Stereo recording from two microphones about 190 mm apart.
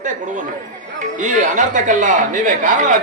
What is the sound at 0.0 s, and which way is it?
Speech, 40° right (ahead or behind).